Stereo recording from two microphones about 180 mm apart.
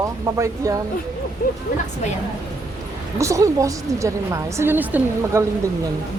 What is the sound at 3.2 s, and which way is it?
A woman's voice, 15° right (ahead or behind).